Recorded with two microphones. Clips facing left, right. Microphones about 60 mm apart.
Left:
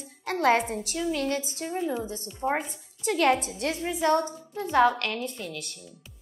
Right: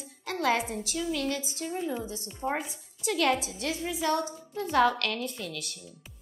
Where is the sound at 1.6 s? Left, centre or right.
Left.